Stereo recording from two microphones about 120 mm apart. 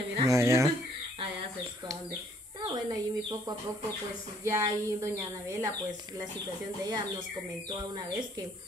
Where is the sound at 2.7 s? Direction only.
30° right (ahead or behind).